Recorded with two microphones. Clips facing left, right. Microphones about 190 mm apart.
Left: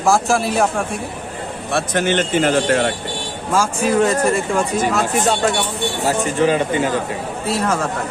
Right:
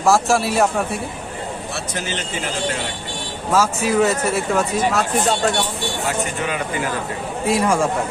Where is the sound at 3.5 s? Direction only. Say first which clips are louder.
Left 1 dB; 5° right (ahead or behind).